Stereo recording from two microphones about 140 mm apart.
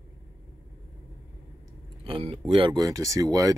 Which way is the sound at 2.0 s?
40° right (ahead or behind).